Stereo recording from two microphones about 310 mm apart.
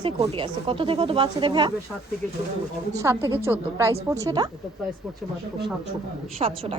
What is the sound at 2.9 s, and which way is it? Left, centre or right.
Speech, centre.